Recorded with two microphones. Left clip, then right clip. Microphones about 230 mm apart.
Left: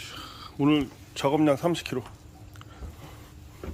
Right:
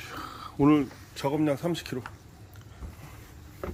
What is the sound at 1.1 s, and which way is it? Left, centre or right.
Speech, centre.